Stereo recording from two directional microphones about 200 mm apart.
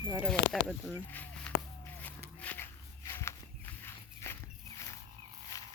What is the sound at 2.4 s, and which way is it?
Walk, 10° left (ahead or behind).